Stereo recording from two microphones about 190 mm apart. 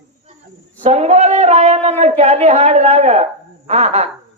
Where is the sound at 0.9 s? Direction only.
35° right (ahead or behind).